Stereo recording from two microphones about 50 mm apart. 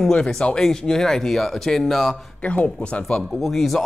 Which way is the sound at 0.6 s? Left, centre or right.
Centre.